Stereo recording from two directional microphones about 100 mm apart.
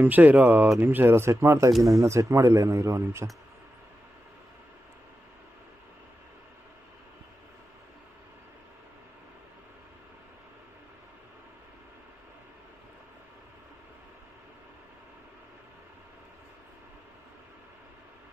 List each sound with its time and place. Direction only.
0.0 s speech: 15° right (ahead or behind)